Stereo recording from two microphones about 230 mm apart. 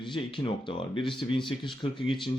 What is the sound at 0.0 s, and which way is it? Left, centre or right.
Speech, left.